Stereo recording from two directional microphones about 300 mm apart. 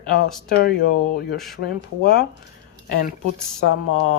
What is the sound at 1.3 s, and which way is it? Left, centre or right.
Speech, centre.